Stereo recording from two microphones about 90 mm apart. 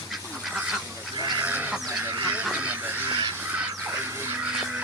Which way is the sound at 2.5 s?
15° right (ahead or behind).